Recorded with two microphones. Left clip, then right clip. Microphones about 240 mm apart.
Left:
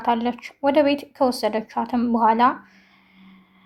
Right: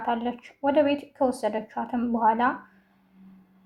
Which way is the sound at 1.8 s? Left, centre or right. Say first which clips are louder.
Left 5 dB; left.